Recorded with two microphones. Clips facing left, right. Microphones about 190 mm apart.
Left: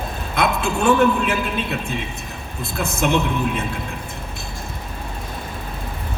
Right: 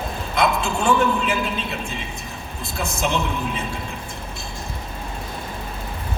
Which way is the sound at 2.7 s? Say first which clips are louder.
Left 4 dB; 60° left (ahead or behind).